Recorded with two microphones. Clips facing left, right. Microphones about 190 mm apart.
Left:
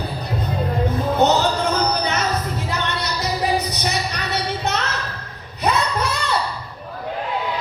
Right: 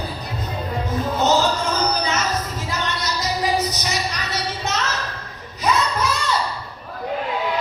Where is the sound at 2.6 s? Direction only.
60° left (ahead or behind).